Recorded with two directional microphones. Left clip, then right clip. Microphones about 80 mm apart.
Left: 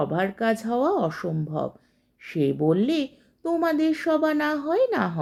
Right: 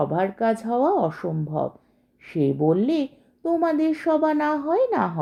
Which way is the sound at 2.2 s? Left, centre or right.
Right.